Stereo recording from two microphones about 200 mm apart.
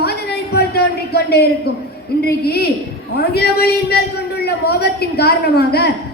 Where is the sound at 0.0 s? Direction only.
55° left (ahead or behind).